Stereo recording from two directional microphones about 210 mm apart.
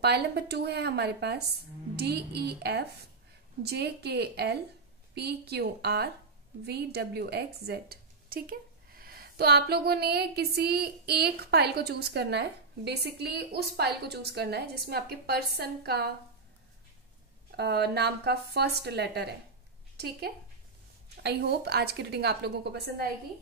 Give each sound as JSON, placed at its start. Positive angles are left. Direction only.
{"t": 0.0, "sound": "a woman's voice", "side_deg": -50}
{"t": 17.6, "sound": "a woman's voice", "side_deg": -50}